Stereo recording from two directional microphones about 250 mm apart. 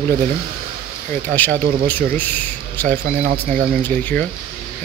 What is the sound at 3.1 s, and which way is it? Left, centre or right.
Speech, right.